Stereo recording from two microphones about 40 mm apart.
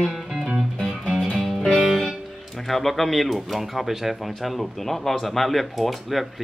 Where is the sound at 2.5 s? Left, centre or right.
Centre.